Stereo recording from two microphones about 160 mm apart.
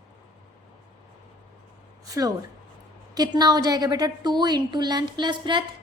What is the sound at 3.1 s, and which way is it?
A woman's voice, 25° right (ahead or behind).